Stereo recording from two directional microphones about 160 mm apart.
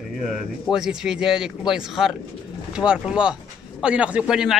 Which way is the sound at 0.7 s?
5° right (ahead or behind).